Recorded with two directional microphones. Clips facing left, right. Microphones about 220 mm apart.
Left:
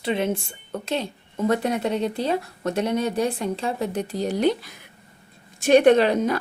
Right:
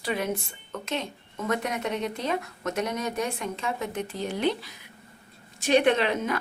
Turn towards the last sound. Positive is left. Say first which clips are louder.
# left 7 dB
turn(degrees=35)  # may be behind; listen again after turning